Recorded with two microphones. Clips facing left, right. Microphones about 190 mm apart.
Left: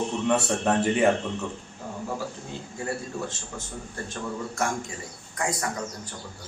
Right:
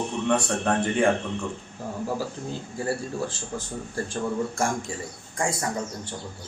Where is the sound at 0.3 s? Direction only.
5° left (ahead or behind).